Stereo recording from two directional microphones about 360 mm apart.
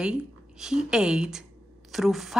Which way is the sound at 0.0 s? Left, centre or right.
Centre.